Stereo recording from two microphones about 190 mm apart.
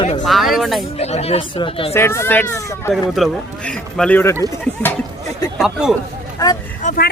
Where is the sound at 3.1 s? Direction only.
Centre (ahead or behind).